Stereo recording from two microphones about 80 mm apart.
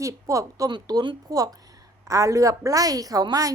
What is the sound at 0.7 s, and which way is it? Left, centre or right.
Speech, right.